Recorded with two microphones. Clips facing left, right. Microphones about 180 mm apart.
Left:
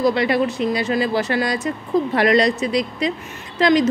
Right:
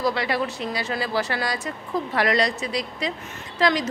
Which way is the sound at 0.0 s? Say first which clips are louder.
Left 6 dB; 20° left (ahead or behind).